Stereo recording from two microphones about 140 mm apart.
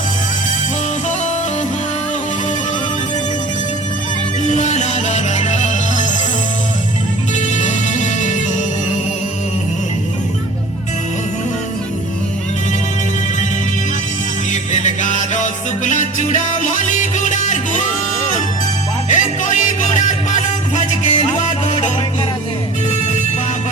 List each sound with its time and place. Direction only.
4.4 s music: 55° left (ahead or behind)
7.3 s music: 60° left (ahead or behind)
14.5 s music: 60° left (ahead or behind)
19.0 s music: 65° left (ahead or behind)